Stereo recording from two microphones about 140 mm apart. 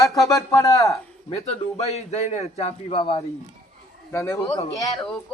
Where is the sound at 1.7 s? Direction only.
50° left (ahead or behind).